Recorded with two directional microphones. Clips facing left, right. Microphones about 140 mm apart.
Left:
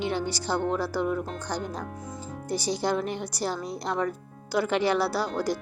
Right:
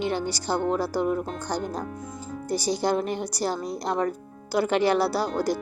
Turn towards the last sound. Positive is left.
turn(degrees=-40)  # may be behind; listen again after turning